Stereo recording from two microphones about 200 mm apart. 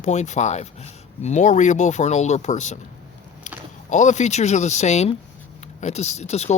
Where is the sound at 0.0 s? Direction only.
35° left (ahead or behind).